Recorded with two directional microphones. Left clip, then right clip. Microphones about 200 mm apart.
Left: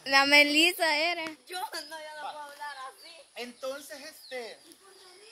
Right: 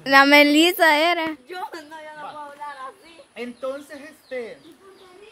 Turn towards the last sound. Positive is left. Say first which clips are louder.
# right 8 dB
turn(degrees=5)  # may be behind; listen again after turning